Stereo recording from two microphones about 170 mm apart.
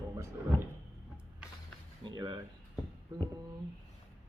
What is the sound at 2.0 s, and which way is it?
Speech, 25° right (ahead or behind).